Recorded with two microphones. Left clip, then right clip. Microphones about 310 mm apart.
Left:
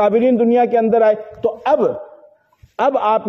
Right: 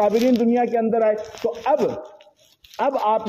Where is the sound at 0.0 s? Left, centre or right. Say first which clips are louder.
Left 4 dB; left.